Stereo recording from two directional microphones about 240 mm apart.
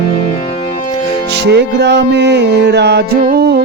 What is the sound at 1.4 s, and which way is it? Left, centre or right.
Music, right.